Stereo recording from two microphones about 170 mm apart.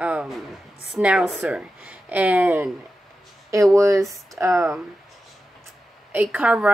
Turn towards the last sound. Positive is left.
turn(degrees=-10)  # may be behind; listen again after turning